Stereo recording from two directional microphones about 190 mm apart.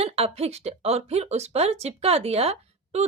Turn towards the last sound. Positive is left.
turn(degrees=-30)  # may be behind; listen again after turning